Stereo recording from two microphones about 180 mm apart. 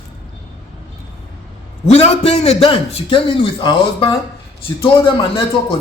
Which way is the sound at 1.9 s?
35° left (ahead or behind).